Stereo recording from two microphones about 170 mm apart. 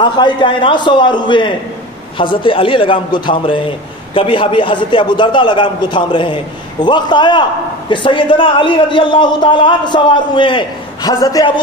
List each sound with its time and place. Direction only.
0.0 s a man's voice: 25° left (ahead or behind)